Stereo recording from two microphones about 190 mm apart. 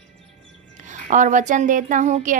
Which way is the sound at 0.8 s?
40° right (ahead or behind).